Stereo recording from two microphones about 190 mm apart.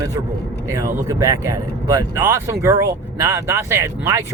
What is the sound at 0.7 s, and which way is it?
Speech, 15° right (ahead or behind).